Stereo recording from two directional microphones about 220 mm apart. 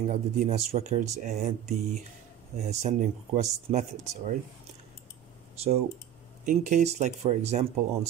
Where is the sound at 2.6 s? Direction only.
30° right (ahead or behind).